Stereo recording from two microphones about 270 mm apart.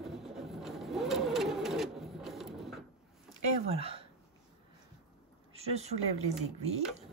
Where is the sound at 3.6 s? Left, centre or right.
Right.